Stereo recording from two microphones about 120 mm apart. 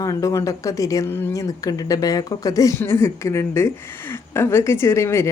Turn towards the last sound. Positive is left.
turn(degrees=25)  # may be behind; listen again after turning